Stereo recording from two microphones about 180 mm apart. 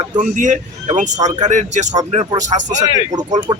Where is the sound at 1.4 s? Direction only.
40° right (ahead or behind).